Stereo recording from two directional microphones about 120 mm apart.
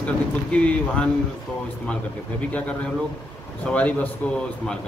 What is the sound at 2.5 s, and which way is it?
Speech, 10° left (ahead or behind).